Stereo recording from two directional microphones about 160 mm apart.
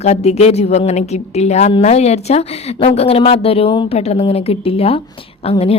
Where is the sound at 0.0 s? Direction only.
40° left (ahead or behind).